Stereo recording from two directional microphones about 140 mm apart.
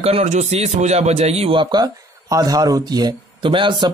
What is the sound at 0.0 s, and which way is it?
A man's voice, 50° right (ahead or behind).